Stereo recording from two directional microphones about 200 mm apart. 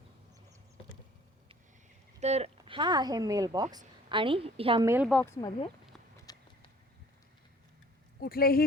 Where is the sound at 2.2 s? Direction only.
30° right (ahead or behind).